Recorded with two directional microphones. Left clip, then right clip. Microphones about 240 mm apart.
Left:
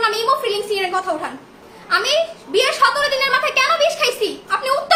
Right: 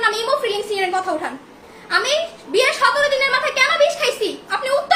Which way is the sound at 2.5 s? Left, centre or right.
Centre.